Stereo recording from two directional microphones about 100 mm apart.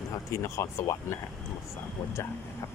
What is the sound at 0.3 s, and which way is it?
Speech, 30° left (ahead or behind).